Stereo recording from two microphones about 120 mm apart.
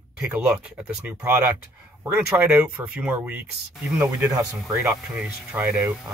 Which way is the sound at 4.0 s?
30° right (ahead or behind).